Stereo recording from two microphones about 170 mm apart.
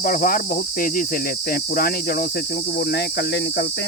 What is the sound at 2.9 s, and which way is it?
Speech, 70° left (ahead or behind).